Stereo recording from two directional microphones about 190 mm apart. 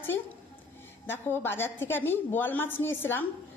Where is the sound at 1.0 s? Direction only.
10° left (ahead or behind).